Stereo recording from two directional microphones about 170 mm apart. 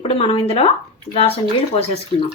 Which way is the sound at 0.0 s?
35° left (ahead or behind).